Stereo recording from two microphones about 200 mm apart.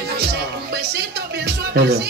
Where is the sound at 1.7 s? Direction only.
55° right (ahead or behind).